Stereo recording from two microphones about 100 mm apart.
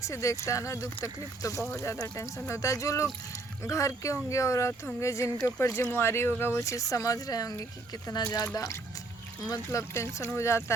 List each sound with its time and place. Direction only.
0.0 s speech: 30° left (ahead or behind)